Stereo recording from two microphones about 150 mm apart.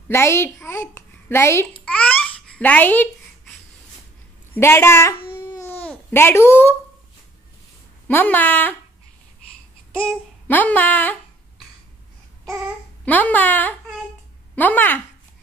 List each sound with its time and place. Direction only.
0.1 s a sound: 15° left (ahead or behind)
4.6 s speech: 15° left (ahead or behind)
5.5 s babbling: 15° left (ahead or behind)
8.1 s speech: 15° left (ahead or behind)
9.9 s speech: 10° left (ahead or behind)
13.0 s a woman's voice: 10° left (ahead or behind)